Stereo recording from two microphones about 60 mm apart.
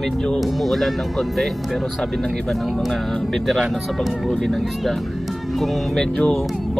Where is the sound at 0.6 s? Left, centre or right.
Centre.